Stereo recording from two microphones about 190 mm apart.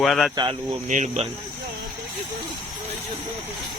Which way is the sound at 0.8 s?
40° right (ahead or behind).